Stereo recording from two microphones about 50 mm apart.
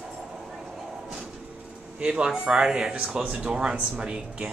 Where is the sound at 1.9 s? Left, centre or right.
Centre.